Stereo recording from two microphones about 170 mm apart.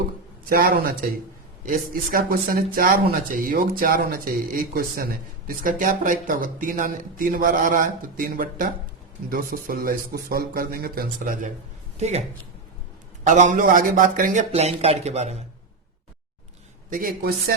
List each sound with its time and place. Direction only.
0.4 s speech: 60° right (ahead or behind)
11.9 s speech: 40° right (ahead or behind)
13.2 s a man's voice: 50° right (ahead or behind)
14.5 s speech: 35° right (ahead or behind)
16.9 s a man's voice: 55° right (ahead or behind)